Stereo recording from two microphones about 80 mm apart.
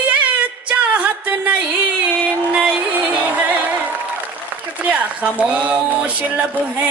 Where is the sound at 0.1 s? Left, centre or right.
Centre.